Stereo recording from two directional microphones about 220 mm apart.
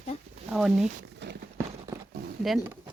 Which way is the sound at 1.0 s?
50° right (ahead or behind).